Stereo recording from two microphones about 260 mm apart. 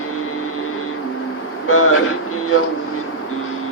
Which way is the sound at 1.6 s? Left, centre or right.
Left.